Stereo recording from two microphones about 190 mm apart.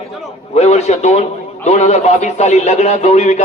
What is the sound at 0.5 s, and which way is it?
A man's voice, 35° left (ahead or behind).